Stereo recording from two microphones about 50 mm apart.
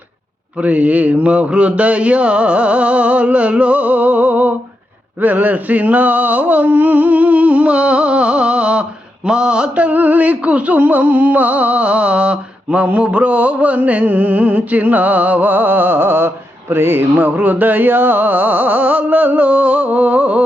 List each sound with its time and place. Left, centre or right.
0.6 s mantra: right
5.2 s a sound: right
9.2 s mantra: centre; by 17.1 s right
17.2 s mantra: right